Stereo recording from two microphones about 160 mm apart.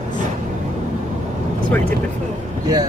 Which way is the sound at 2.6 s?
25° right (ahead or behind).